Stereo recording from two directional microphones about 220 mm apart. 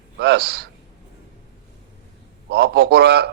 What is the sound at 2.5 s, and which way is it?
Speech, 45° right (ahead or behind).